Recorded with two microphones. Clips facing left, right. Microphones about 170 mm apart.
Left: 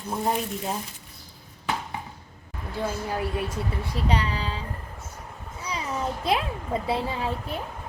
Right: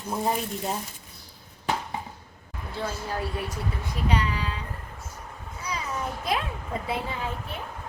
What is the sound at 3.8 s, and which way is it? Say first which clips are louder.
Speech: even; 30° left (ahead or behind).